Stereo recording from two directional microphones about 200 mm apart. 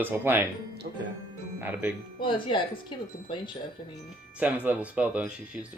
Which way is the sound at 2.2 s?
25° left (ahead or behind).